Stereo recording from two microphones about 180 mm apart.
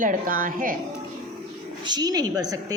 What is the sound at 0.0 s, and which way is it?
Speech, 50° right (ahead or behind).